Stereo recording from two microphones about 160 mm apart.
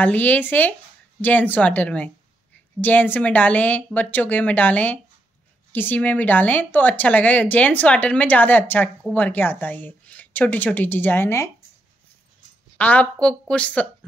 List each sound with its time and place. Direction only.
0.0 s speech: 10° left (ahead or behind)
12.7 s speech: 10° left (ahead or behind)